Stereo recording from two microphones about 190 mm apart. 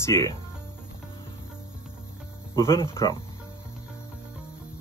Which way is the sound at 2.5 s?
20° left (ahead or behind).